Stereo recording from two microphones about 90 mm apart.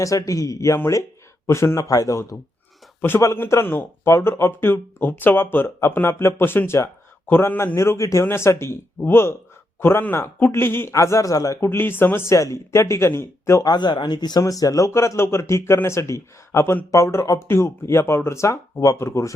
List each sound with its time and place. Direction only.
0.0 s speech: 40° left (ahead or behind)
3.3 s speech: 25° left (ahead or behind)
10.9 s speech: 35° left (ahead or behind)
13.7 s speech: 60° left (ahead or behind); by 19.3 s 30° left (ahead or behind)